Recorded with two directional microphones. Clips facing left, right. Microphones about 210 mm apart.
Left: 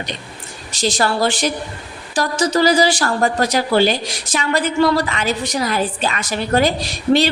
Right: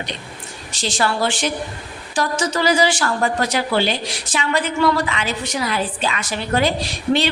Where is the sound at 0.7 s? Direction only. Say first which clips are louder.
Left 3 dB; 40° left (ahead or behind).